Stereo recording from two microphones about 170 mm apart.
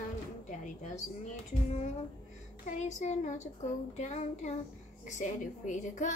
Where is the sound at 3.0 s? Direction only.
45° left (ahead or behind).